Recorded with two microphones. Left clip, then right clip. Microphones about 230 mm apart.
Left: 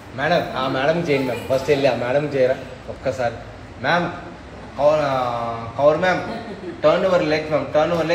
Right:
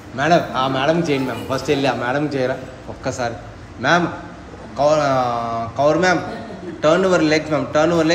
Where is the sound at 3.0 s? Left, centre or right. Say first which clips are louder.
Left 1 dB; centre.